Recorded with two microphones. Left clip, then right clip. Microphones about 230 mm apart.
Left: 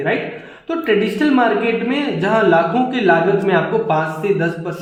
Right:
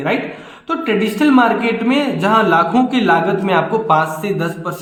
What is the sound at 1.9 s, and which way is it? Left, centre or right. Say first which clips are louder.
A man's voice: right 3 dB; right.